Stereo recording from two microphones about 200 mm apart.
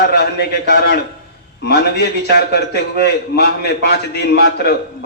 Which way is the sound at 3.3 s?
55° left (ahead or behind).